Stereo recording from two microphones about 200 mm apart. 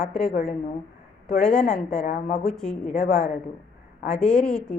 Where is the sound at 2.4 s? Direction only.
Centre (ahead or behind).